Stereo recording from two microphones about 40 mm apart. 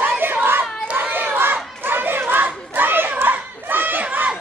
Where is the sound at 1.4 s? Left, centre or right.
Right.